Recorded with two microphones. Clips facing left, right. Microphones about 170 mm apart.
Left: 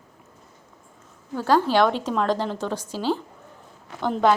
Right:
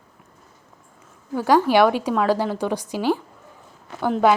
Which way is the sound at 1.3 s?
10° right (ahead or behind).